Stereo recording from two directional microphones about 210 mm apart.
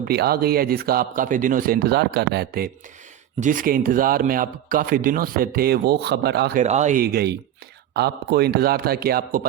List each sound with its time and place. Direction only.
0.0 s speech: 50° right (ahead or behind)
6.6 s speech: 35° right (ahead or behind)